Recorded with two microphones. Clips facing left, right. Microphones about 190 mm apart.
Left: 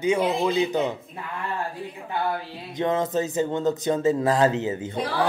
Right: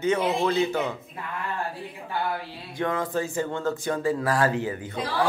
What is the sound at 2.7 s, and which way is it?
Speech, 20° left (ahead or behind).